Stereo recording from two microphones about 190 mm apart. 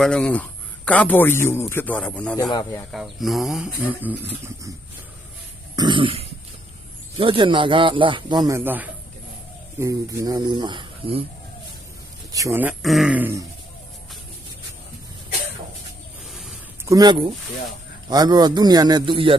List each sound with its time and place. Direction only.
0.0 s a man's voice: 5° left (ahead or behind)
2.4 s speech: 20° left (ahead or behind)
2.9 s speech: centre (ahead or behind)
5.7 s throat clearing: 25° right (ahead or behind)
7.2 s speech: 25° right (ahead or behind)
12.3 s speech: 15° right (ahead or behind)
16.8 s speech: 20° right (ahead or behind)